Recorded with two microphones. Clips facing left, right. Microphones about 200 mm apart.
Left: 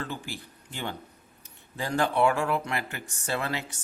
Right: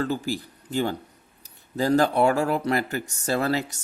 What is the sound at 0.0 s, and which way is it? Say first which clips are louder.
Speech: right 10 dB; 40° right (ahead or behind).